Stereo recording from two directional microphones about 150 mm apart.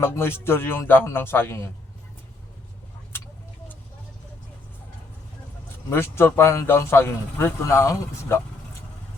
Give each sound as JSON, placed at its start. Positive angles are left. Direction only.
{"t": 0.0, "sound": "speech", "side_deg": 15}
{"t": 5.9, "sound": "speech", "side_deg": 15}